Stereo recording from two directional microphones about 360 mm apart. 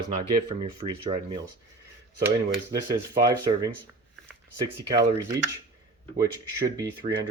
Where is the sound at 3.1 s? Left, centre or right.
Centre.